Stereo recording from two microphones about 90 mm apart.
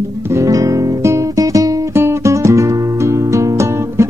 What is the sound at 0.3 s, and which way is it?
Music, 35° right (ahead or behind).